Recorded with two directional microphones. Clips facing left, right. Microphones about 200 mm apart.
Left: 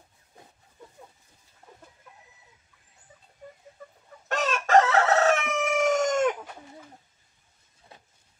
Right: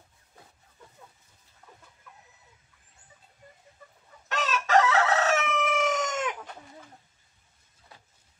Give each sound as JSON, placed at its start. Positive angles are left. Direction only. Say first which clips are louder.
{"t": 4.3, "sound": "chicken", "louder": "left 3 dB", "side_deg": 50}